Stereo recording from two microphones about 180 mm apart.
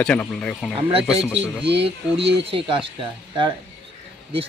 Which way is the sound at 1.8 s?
30° right (ahead or behind).